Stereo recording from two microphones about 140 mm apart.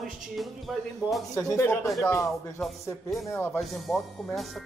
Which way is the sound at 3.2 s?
20° left (ahead or behind).